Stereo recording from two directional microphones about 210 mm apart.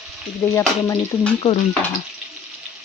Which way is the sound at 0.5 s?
10° left (ahead or behind).